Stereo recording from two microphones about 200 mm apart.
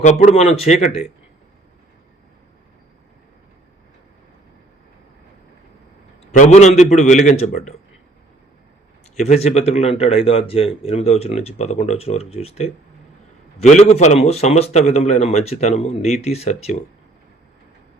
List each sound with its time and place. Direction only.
0.0 s speech: 35° left (ahead or behind)
6.3 s speech: 35° left (ahead or behind)
9.1 s speech: 35° left (ahead or behind)